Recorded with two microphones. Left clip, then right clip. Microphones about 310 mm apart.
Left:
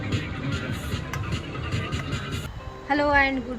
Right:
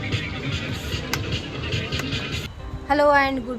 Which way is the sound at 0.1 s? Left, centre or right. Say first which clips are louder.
Right 3 dB; centre.